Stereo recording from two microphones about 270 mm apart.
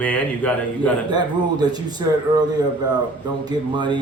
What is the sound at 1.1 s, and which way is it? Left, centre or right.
Speech, centre.